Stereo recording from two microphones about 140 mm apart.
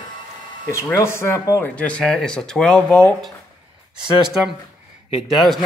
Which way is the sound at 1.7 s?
10° left (ahead or behind).